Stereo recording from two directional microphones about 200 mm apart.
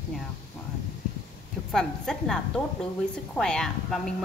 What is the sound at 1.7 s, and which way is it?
Speech, centre (ahead or behind).